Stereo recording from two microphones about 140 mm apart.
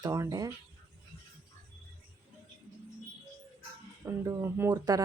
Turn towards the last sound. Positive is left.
turn(degrees=-30)  # may be behind; listen again after turning